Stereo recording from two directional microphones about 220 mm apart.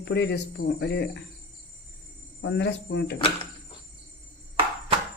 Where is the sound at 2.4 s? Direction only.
50° left (ahead or behind).